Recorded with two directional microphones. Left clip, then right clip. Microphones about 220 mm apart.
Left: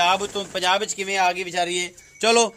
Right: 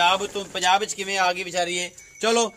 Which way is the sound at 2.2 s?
40° left (ahead or behind).